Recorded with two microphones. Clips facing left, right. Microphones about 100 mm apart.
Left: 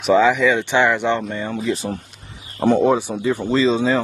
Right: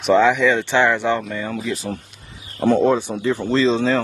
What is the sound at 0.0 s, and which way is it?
Speech, centre (ahead or behind).